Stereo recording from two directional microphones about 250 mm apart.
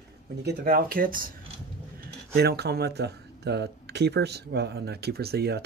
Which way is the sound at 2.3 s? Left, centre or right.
Right.